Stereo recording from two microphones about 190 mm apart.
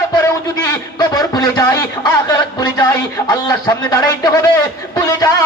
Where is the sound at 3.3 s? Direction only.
20° left (ahead or behind).